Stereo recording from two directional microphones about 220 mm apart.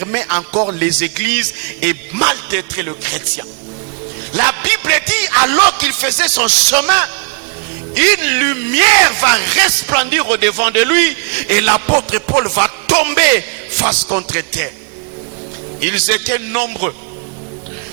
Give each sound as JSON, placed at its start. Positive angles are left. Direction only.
{"t": 0.0, "sound": "music", "side_deg": -10}
{"t": 0.5, "sound": "music", "side_deg": -30}
{"t": 0.8, "sound": "speech", "side_deg": -10}
{"t": 15.8, "sound": "speech", "side_deg": -10}